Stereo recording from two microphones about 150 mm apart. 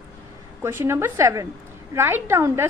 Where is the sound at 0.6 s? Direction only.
15° right (ahead or behind).